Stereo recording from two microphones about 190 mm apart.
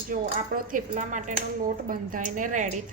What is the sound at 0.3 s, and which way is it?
Speech, 45° right (ahead or behind).